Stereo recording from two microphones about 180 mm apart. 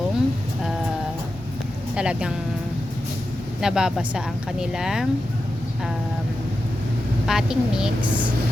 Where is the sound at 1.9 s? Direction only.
5° right (ahead or behind).